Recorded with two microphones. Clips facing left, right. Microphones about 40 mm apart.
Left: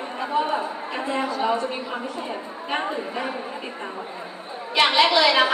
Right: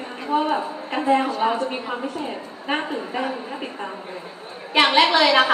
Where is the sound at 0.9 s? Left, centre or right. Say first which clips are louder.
Right 8 dB; right.